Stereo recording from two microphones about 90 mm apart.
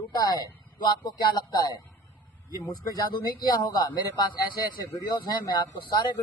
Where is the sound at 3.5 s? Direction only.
45° left (ahead or behind).